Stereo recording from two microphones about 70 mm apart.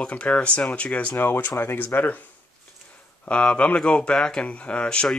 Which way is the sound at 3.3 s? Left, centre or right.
Centre.